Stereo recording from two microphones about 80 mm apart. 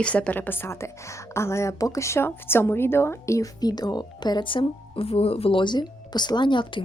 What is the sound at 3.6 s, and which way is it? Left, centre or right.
Speech, left.